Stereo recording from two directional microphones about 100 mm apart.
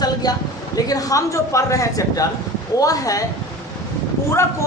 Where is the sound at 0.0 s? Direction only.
40° left (ahead or behind).